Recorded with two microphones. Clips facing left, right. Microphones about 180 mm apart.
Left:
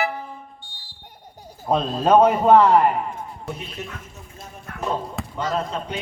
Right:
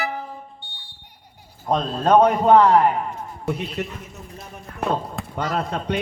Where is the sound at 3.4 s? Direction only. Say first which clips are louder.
Right 9 dB; 65° right (ahead or behind).